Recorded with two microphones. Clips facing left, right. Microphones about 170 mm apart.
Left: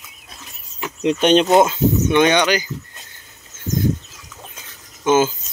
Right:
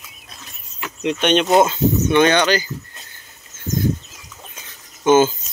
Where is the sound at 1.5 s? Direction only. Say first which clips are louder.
Left 1 dB; 10° left (ahead or behind).